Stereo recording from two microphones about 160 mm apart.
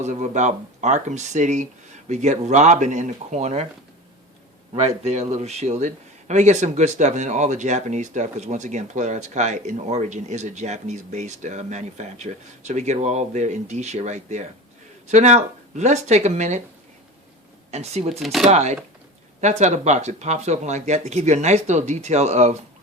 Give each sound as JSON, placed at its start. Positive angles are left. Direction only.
{"t": 0.0, "sound": "a man's voice", "side_deg": -45}
{"t": 4.8, "sound": "a man's voice", "side_deg": -40}
{"t": 17.7, "sound": "a man's voice", "side_deg": -45}
{"t": 18.2, "sound": "speech", "side_deg": 0}
{"t": 18.4, "sound": "a man's voice", "side_deg": -45}